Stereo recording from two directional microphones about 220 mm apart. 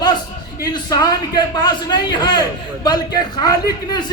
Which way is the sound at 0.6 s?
15° left (ahead or behind).